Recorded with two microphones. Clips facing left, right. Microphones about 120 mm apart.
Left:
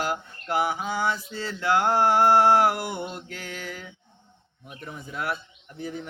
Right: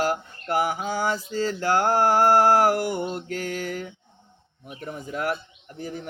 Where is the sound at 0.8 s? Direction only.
40° right (ahead or behind).